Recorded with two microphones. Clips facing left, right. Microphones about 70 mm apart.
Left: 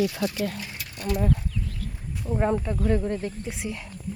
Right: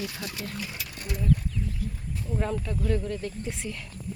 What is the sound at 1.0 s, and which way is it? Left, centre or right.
Speech, left.